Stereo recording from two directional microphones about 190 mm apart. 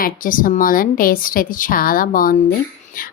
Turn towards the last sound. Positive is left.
turn(degrees=45)  # may be behind; listen again after turning